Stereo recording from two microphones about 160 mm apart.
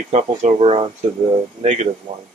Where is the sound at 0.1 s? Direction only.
50° right (ahead or behind).